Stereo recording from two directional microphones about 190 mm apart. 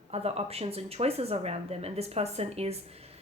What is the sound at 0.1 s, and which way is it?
Speech, 30° right (ahead or behind).